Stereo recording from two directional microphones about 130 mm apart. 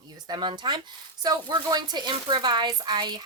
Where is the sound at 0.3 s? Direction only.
35° right (ahead or behind).